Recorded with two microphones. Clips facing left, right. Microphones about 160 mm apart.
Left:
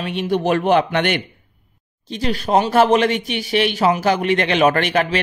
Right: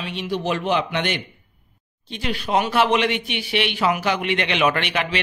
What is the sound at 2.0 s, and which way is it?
A man's voice, 40° left (ahead or behind).